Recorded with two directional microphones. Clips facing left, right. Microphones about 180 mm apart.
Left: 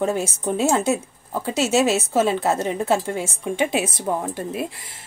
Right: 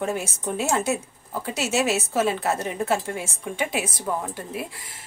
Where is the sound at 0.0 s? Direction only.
25° left (ahead or behind).